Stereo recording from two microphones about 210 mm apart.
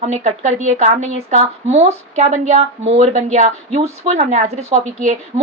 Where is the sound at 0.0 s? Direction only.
35° right (ahead or behind).